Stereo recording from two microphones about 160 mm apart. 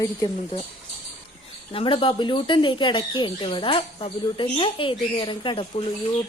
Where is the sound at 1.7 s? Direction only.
35° left (ahead or behind).